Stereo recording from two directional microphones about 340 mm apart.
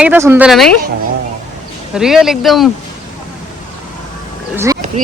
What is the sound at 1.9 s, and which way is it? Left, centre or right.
Speech, centre.